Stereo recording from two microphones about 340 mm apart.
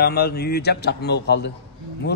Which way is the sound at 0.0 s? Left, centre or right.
Left.